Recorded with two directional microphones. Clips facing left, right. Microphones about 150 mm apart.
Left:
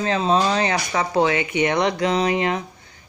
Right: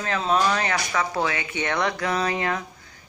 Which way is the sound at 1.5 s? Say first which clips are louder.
Left 6 dB; 15° left (ahead or behind).